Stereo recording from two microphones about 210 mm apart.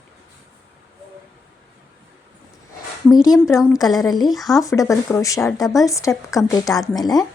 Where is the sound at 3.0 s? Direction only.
15° left (ahead or behind).